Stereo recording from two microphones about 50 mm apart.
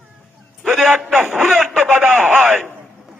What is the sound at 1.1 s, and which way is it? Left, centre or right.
Radio, right.